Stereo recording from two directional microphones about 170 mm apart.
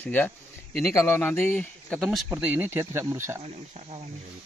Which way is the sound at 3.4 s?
35° right (ahead or behind).